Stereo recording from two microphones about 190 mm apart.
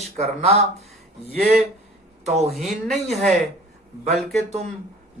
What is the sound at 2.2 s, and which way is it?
Speech, 35° right (ahead or behind).